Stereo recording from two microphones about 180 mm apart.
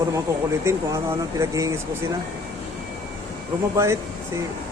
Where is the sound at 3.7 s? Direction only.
15° right (ahead or behind).